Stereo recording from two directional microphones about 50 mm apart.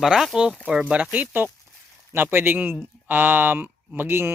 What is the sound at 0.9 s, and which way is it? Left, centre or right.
Speech, right.